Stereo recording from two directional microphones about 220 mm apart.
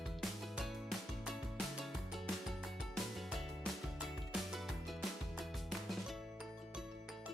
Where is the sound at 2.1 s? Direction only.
Centre (ahead or behind).